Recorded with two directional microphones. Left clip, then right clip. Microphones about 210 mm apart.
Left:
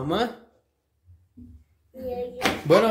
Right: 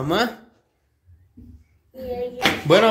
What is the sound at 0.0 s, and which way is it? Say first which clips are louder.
Speech: right 4 dB; centre (ahead or behind).